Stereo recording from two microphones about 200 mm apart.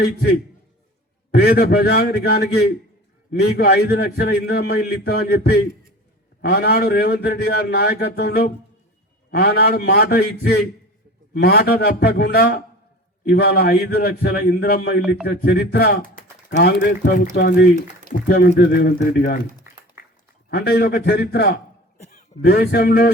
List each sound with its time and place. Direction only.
0.0 s a man's voice: 50° left (ahead or behind)
20.5 s a man's voice: 50° left (ahead or behind)